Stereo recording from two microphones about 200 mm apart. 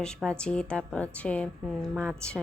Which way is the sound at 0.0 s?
5° left (ahead or behind).